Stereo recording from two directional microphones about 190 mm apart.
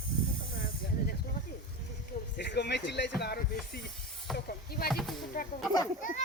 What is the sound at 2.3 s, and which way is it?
Speech, 65° left (ahead or behind).